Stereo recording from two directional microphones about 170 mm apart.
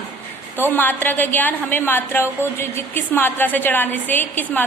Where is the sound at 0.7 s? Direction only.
10° left (ahead or behind).